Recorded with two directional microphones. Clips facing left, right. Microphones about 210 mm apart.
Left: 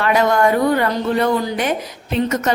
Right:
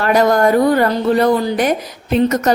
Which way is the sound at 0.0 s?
40° right (ahead or behind).